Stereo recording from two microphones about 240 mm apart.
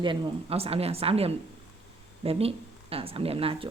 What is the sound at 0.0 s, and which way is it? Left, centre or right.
A woman's voice, right.